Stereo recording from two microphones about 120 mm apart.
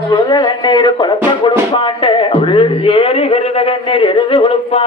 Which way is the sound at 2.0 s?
45° left (ahead or behind).